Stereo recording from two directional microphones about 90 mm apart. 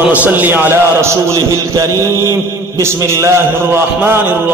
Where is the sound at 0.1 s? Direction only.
15° right (ahead or behind).